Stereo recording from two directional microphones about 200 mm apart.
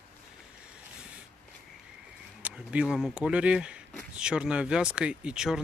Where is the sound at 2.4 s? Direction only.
5° right (ahead or behind).